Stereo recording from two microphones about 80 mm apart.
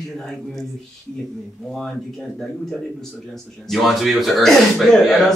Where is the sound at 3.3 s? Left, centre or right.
Centre.